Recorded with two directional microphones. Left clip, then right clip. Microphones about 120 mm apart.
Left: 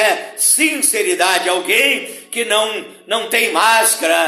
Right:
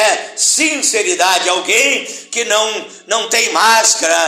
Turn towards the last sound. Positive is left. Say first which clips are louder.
# right 2 dB
turn(degrees=35)  # may be behind; listen again after turning